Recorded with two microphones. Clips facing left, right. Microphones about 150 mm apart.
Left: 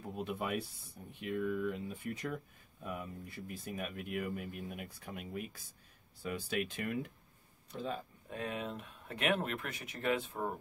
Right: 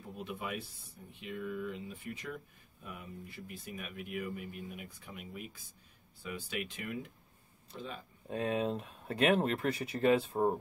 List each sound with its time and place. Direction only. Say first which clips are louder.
0.0 s speech: left 3 dB; 45° left (ahead or behind)
6.2 s speech: left 3 dB; 45° left (ahead or behind)
8.3 s speech: right 7 dB; 30° right (ahead or behind)